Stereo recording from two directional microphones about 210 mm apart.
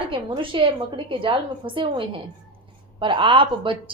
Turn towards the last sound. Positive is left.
turn(degrees=-25)  # may be behind; listen again after turning